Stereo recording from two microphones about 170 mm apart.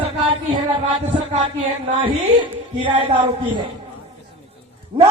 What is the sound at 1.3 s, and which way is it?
Music, 30° right (ahead or behind).